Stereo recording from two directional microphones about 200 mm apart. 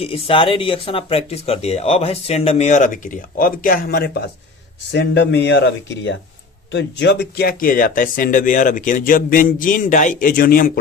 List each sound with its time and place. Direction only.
0.0 s speech: 25° left (ahead or behind); by 10.7 s 45° left (ahead or behind)